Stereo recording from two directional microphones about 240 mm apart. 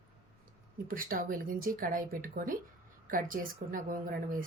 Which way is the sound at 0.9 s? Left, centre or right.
Right.